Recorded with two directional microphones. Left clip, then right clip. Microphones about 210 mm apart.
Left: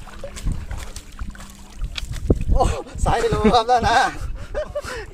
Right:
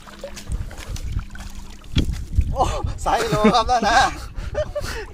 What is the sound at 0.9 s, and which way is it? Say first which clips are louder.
Boat: right 1 dB; 15° left (ahead or behind).